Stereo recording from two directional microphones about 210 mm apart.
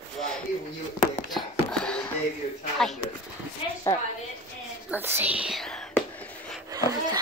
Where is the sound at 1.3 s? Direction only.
Centre (ahead or behind).